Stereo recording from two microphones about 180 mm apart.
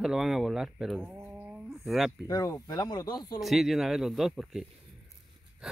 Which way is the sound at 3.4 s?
Centre (ahead or behind).